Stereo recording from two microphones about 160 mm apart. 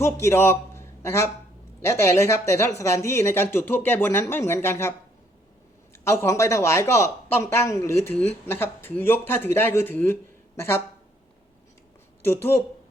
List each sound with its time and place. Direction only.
0.0 s a man's voice: 15° left (ahead or behind)
12.2 s speech: 15° left (ahead or behind)